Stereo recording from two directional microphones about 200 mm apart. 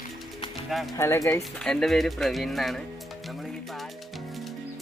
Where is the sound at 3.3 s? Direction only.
Centre (ahead or behind).